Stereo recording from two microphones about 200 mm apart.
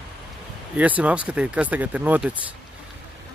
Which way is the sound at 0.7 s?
5° right (ahead or behind).